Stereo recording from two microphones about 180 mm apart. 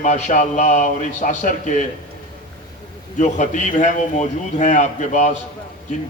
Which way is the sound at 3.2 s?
45° left (ahead or behind).